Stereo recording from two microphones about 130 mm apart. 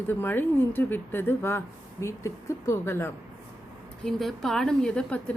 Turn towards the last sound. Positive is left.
turn(degrees=5)  # may be behind; listen again after turning